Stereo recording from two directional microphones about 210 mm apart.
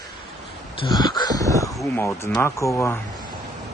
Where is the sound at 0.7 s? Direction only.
20° left (ahead or behind).